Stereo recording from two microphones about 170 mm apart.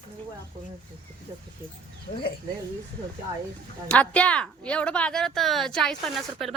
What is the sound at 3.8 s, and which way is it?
Speech, 5° left (ahead or behind).